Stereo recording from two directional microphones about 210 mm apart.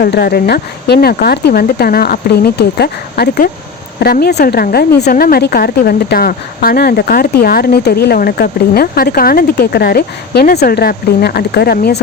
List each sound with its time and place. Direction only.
0.0 s a woman's voice: 45° left (ahead or behind)